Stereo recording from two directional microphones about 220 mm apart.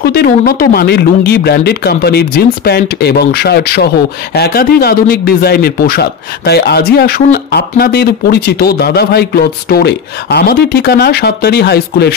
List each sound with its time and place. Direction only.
0.0 s speech: 45° left (ahead or behind)